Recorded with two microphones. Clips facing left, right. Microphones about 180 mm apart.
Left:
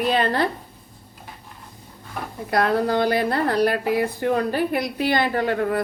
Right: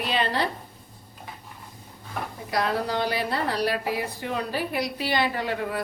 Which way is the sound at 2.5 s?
55° left (ahead or behind).